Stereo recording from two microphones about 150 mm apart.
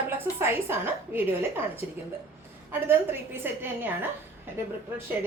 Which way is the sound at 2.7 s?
15° right (ahead or behind).